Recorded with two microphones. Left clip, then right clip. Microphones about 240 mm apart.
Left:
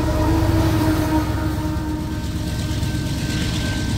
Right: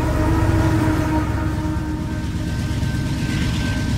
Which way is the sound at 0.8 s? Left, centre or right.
Left.